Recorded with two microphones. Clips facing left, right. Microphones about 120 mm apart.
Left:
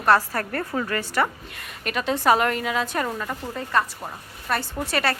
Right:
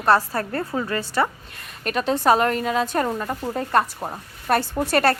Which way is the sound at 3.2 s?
20° right (ahead or behind).